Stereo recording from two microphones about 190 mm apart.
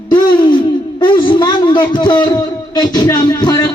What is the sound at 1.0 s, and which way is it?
A man's voice, 25° left (ahead or behind).